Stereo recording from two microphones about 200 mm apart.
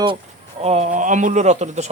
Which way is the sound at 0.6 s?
35° right (ahead or behind).